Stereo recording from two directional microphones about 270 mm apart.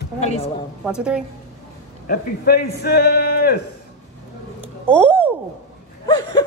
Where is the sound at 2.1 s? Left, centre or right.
Left.